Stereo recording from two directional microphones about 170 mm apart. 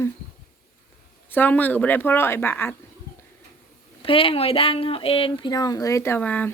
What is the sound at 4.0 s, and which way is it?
Speech, 30° left (ahead or behind).